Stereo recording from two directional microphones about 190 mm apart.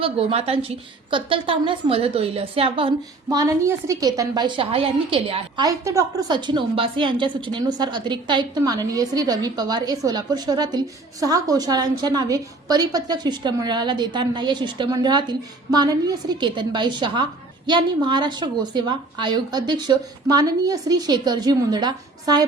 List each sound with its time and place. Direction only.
0.0 s a woman's voice: 30° right (ahead or behind)
3.2 s a woman's voice: 15° right (ahead or behind)